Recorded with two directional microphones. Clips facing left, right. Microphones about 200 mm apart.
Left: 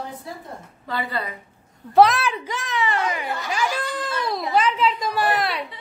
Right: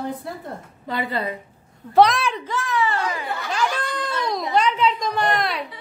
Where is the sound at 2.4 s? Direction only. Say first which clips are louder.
Right 2 dB; 20° left (ahead or behind).